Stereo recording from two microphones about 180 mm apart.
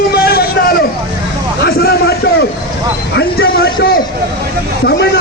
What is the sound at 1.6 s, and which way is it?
Speech, 60° left (ahead or behind).